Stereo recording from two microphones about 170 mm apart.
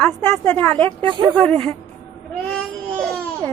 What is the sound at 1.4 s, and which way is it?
Child singing, 5° left (ahead or behind).